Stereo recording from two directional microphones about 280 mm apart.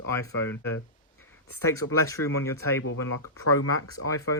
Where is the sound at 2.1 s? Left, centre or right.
Centre.